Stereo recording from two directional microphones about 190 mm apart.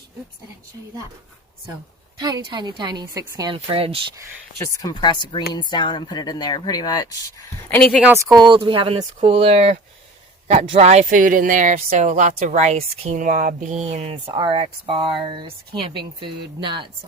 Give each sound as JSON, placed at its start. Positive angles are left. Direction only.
{"t": 2.1, "sound": "a woman's voice", "side_deg": -20}
{"t": 4.5, "sound": "speech", "side_deg": 15}
{"t": 7.7, "sound": "speech", "side_deg": 5}
{"t": 8.0, "sound": "a woman's voice", "side_deg": -15}